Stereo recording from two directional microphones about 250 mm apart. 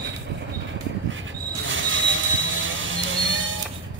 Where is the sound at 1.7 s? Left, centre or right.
Right.